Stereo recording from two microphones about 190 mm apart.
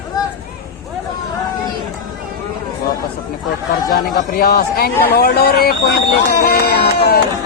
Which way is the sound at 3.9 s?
55° left (ahead or behind).